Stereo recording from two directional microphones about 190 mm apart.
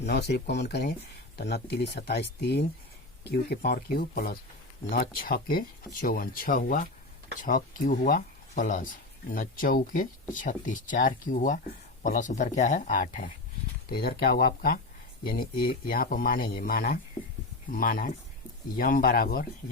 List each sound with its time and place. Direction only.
0.0 s speech: 60° left (ahead or behind)